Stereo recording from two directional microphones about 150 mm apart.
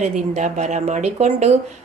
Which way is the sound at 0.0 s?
50° right (ahead or behind).